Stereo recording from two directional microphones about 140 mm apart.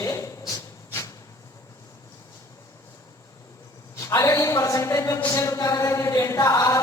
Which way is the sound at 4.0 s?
20° left (ahead or behind).